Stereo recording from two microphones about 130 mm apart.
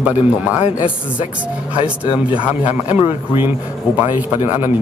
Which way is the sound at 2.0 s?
40° left (ahead or behind).